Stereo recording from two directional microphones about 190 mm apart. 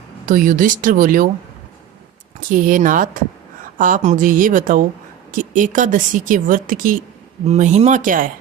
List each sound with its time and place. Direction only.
0.3 s speech: 45° right (ahead or behind)
2.5 s speech: 45° right (ahead or behind)